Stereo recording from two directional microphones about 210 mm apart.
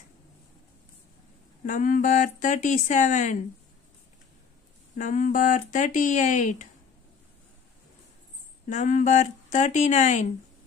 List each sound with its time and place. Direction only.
1.7 s speech: 40° left (ahead or behind)
4.9 s speech: 35° left (ahead or behind)
8.6 s speech: 35° left (ahead or behind)